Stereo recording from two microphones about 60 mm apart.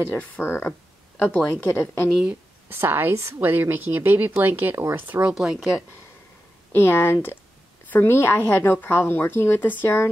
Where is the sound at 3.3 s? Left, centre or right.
Right.